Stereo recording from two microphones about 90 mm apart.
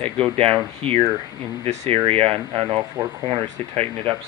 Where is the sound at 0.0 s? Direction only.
90° right.